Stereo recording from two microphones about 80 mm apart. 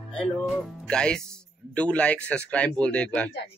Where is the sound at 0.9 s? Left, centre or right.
Centre.